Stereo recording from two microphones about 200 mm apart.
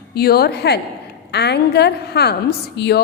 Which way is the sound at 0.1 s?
50° left (ahead or behind).